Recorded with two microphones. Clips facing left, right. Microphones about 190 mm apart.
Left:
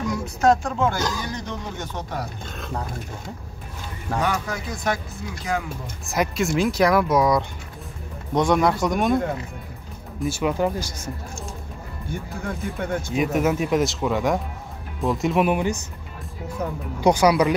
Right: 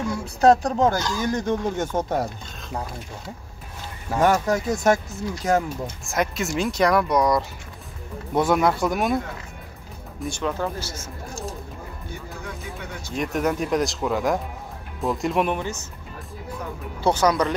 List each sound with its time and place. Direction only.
0.1 s speech: 35° right (ahead or behind)
1.2 s speech: 50° right (ahead or behind)
4.2 s speech: 45° right (ahead or behind)
6.0 s speech: centre (ahead or behind)
10.2 s speech: 10° left (ahead or behind)
12.1 s speech: 55° left (ahead or behind)
13.1 s speech: 5° left (ahead or behind)
17.0 s speech: 10° left (ahead or behind)